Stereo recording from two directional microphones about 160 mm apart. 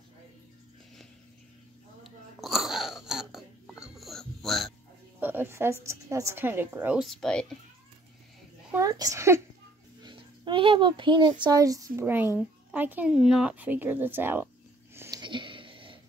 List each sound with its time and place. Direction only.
2.0 s a sound: centre (ahead or behind)
5.2 s speech: 15° right (ahead or behind)
7.1 s speech: 5° left (ahead or behind)
8.7 s speech: 20° right (ahead or behind)
10.0 s speech: 30° right (ahead or behind); by 14.5 s 15° right (ahead or behind)
15.0 s a sound: 25° right (ahead or behind)